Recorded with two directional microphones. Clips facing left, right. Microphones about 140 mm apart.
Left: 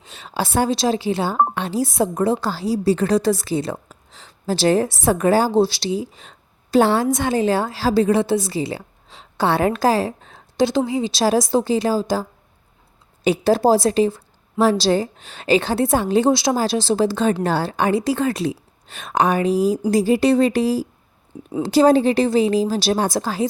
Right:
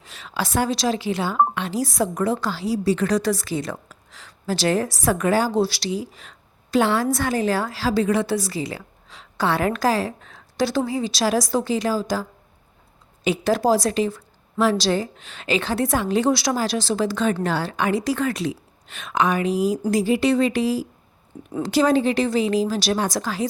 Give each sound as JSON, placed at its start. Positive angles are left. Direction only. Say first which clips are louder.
{"t": 0.0, "sound": "a woman's voice", "louder": "left 3 dB", "side_deg": 25}
{"t": 10.6, "sound": "a woman's voice", "louder": "left 3 dB", "side_deg": 20}
{"t": 13.2, "sound": "a woman's voice", "louder": "left 4 dB", "side_deg": 35}